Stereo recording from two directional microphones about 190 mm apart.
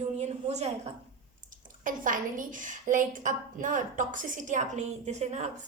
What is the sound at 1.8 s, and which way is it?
A woman's voice, 45° right (ahead or behind).